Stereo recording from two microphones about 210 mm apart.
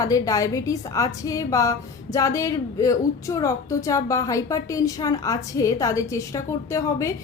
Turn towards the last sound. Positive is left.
turn(degrees=15)  # may be behind; listen again after turning